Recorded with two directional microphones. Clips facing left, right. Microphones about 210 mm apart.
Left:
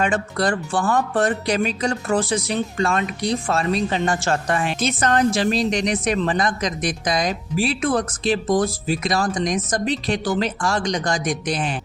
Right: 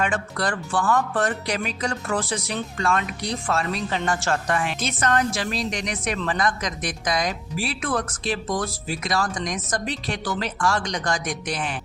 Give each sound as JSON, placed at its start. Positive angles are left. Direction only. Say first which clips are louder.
{"t": 0.0, "sound": "speech", "louder": "left 4 dB", "side_deg": 25}